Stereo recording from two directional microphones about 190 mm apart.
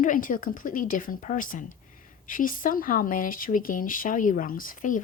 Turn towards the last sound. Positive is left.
turn(degrees=45)  # may be behind; listen again after turning